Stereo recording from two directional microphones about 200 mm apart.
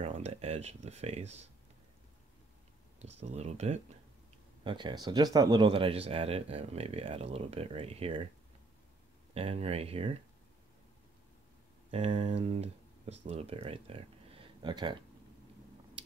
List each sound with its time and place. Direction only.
0.0 s speech: 30° right (ahead or behind)
3.0 s speech: 30° right (ahead or behind)
4.6 s speech: 20° right (ahead or behind)
9.3 s speech: 30° right (ahead or behind)
11.9 s speech: 30° right (ahead or behind)